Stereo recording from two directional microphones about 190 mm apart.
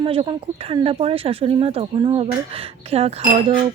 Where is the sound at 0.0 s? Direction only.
30° right (ahead or behind).